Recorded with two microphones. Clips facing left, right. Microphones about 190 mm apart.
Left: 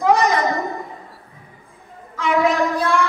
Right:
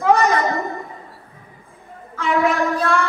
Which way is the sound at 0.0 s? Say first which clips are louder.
Even; 15° left (ahead or behind).